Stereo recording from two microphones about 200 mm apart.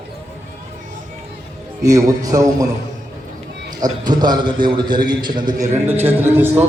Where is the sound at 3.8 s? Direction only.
20° right (ahead or behind).